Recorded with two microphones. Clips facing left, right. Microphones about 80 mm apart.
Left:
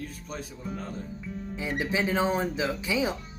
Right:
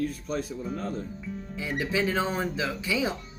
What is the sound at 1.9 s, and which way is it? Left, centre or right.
Speech, left.